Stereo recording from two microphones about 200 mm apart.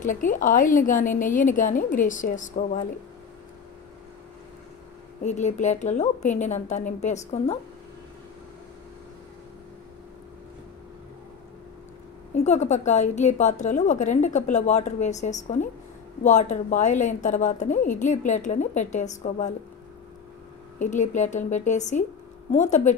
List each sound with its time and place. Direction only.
0.0 s a woman's voice: 40° left (ahead or behind)
5.2 s a woman's voice: 35° left (ahead or behind)
12.4 s a woman's voice: 35° left (ahead or behind)
20.8 s a woman's voice: 35° left (ahead or behind)